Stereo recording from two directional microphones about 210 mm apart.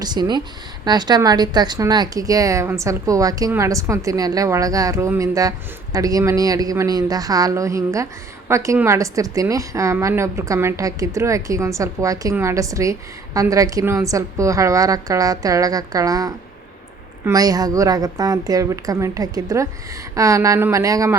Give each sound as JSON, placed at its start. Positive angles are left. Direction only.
{"t": 0.0, "sound": "a woman's voice", "side_deg": -20}